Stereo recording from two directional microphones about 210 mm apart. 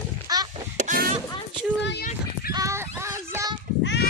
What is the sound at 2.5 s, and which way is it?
A child's voice, 15° right (ahead or behind).